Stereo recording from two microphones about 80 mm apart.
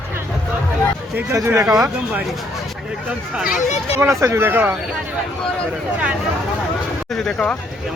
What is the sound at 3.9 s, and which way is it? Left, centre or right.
Speech, right.